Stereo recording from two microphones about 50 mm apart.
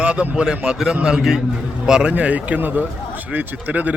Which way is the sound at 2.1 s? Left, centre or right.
Right.